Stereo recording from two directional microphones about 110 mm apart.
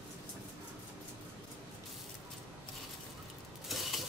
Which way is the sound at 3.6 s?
Centre (ahead or behind).